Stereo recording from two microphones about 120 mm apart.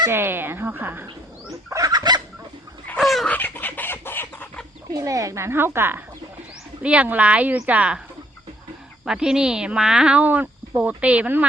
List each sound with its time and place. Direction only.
0.1 s speech: 20° right (ahead or behind)
1.7 s fowl: 30° right (ahead or behind)
3.0 s dog: centre (ahead or behind)
3.2 s chicken: 15° left (ahead or behind)
4.9 s speech: 30° right (ahead or behind); by 8.0 s 10° right (ahead or behind)
9.0 s speech: 5° right (ahead or behind)